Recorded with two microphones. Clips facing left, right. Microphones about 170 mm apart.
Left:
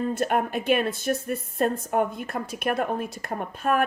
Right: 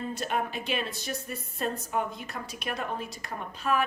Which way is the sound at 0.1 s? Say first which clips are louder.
Left 7 dB; 50° left (ahead or behind).